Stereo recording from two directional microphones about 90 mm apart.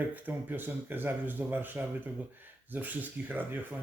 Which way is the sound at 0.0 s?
20° right (ahead or behind).